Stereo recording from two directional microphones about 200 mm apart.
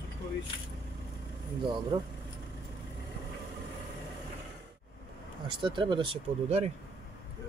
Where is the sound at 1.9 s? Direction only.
20° right (ahead or behind).